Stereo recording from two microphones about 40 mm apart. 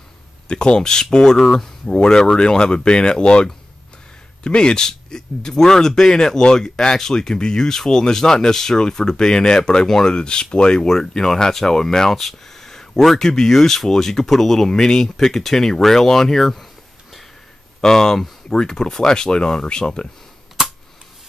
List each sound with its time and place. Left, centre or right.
0.5 s speech: left
10.8 s speech: centre
17.7 s speech: centre